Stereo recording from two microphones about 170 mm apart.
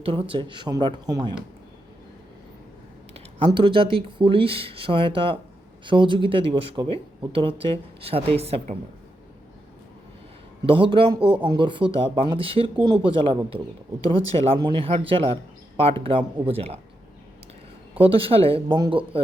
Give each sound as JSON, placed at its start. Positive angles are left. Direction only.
{"t": 0.0, "sound": "speech", "side_deg": -30}
{"t": 3.3, "sound": "speech", "side_deg": -30}
{"t": 10.7, "sound": "speech", "side_deg": -30}
{"t": 18.0, "sound": "speech", "side_deg": -35}